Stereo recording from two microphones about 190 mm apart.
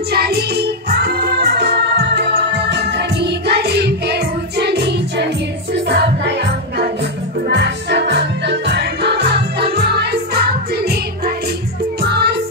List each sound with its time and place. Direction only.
0.1 s music: 55° right (ahead or behind)